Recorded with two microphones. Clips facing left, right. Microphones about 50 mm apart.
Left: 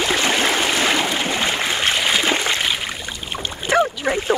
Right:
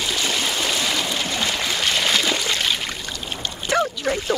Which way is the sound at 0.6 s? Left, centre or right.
Left.